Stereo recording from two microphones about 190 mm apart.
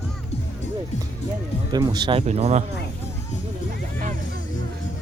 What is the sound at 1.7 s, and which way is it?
Speech, 20° right (ahead or behind).